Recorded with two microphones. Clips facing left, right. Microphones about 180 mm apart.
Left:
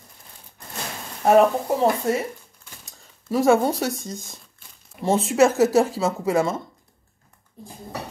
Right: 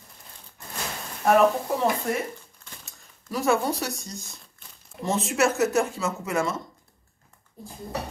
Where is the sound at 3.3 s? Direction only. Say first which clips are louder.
Left 6 dB; 30° left (ahead or behind).